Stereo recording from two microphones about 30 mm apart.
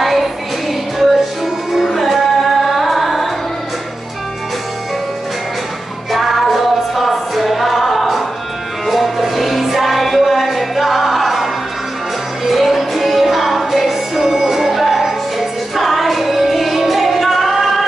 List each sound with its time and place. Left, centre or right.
0.0 s music: centre
6.1 s music: centre